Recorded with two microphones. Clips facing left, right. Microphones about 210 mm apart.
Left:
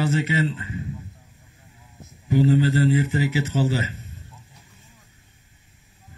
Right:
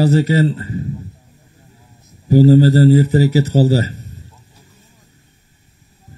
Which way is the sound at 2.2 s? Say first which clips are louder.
Right 9 dB; 35° right (ahead or behind).